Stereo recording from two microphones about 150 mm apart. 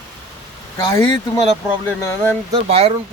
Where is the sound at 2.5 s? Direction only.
40° right (ahead or behind).